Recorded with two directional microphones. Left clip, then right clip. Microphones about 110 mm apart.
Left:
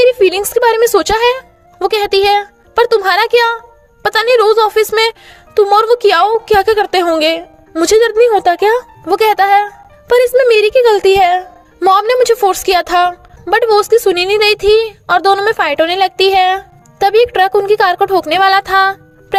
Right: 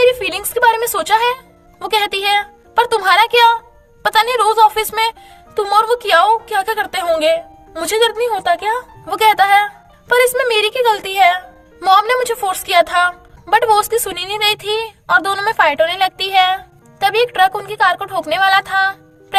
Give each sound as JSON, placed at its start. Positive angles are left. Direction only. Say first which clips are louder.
{"t": 0.0, "sound": "music", "louder": "left 5 dB", "side_deg": 55}
{"t": 2.9, "sound": "a woman's voice", "louder": "even", "side_deg": 55}
{"t": 5.7, "sound": "a woman's voice", "louder": "left 1 dB", "side_deg": 80}
{"t": 7.7, "sound": "a woman's voice", "louder": "left 6 dB", "side_deg": 45}
{"t": 18.3, "sound": "music", "louder": "even", "side_deg": 65}